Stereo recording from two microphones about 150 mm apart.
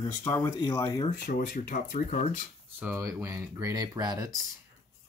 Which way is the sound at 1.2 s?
75° left (ahead or behind).